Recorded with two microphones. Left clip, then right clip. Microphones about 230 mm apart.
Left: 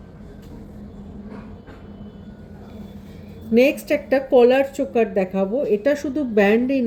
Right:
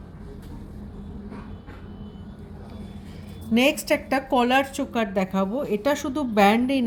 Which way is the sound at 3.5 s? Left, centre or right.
Right.